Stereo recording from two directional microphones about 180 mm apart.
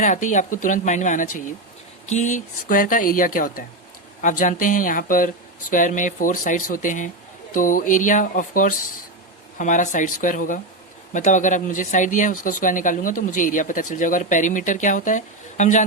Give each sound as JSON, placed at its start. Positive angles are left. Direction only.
{"t": 0.0, "sound": "speech", "side_deg": 45}